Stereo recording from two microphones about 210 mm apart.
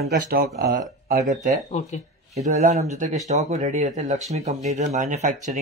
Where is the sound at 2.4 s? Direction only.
35° right (ahead or behind).